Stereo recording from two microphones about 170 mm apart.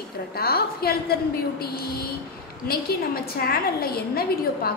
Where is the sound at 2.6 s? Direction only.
65° left (ahead or behind).